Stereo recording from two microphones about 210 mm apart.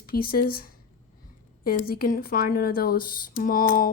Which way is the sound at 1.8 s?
45° left (ahead or behind).